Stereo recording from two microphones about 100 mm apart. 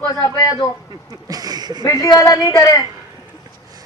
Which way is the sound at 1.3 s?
40° right (ahead or behind).